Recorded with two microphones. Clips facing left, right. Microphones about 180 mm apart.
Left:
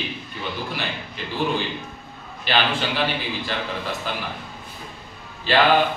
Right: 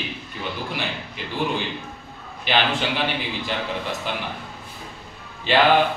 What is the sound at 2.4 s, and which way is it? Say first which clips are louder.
A man's voice: even; 15° right (ahead or behind).